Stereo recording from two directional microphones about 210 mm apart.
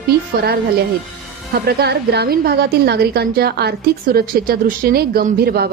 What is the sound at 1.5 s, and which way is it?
Speech, 50° right (ahead or behind).